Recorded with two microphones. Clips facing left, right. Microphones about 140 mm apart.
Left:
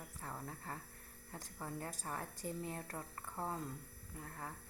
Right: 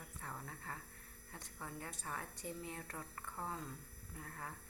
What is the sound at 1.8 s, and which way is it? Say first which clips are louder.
A woman's voice: left 2 dB; 35° left (ahead or behind).